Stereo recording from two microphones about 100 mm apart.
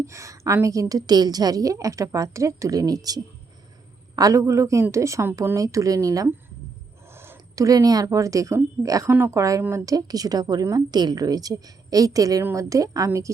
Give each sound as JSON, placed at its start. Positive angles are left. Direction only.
{"t": 0.0, "sound": "a woman's voice", "side_deg": -30}